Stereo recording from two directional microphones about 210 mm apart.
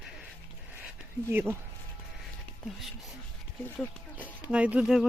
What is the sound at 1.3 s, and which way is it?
Speech, 10° right (ahead or behind).